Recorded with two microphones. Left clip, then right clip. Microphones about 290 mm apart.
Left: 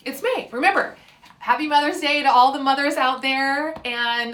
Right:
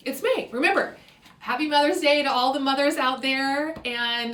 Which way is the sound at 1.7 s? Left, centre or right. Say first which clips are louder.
Even; centre.